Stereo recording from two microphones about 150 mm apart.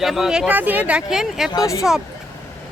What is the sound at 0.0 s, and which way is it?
Speech, centre (ahead or behind).